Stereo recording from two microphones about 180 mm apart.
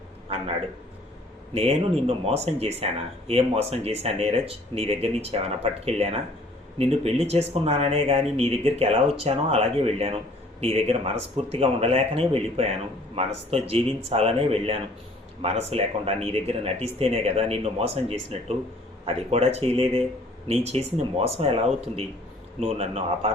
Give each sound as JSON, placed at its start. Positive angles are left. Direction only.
{"t": 1.5, "sound": "speech", "side_deg": -35}